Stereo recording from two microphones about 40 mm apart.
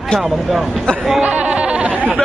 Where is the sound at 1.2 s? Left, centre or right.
Right.